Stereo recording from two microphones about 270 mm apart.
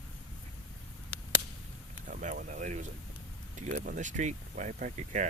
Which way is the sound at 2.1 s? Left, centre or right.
Right.